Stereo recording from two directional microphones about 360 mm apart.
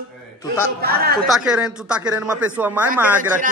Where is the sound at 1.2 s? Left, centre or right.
Centre.